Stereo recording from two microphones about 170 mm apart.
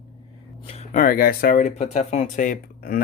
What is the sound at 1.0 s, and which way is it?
Speech, 55° left (ahead or behind).